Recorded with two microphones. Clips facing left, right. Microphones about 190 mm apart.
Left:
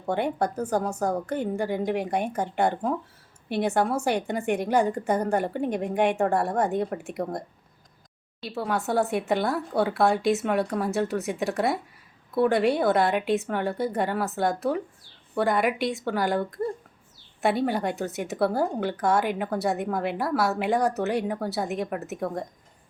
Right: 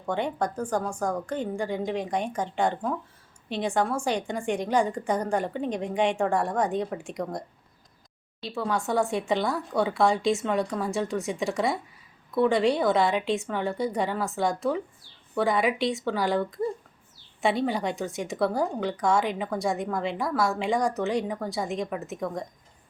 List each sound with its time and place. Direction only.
0.0 s a woman's voice: 10° left (ahead or behind)
8.5 s a woman's voice: 5° left (ahead or behind)
17.7 s speech: centre (ahead or behind)